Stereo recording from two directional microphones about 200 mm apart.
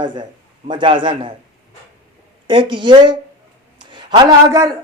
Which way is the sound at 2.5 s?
25° right (ahead or behind).